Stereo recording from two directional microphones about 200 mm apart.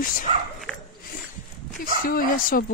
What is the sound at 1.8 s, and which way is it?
Speech, 45° left (ahead or behind).